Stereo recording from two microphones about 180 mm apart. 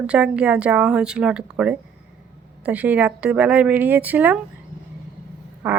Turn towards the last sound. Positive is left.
turn(degrees=-10)  # may be behind; listen again after turning